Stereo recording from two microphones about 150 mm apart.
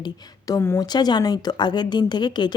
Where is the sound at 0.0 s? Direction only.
25° left (ahead or behind).